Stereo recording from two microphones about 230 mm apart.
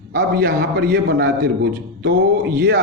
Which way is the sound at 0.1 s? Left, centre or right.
Right.